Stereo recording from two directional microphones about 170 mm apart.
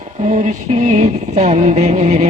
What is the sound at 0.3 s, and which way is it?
Music, 45° right (ahead or behind).